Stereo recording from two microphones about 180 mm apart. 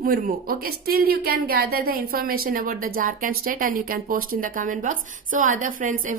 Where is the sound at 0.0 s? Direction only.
55° right (ahead or behind).